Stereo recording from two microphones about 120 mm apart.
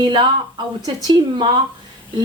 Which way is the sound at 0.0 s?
40° right (ahead or behind).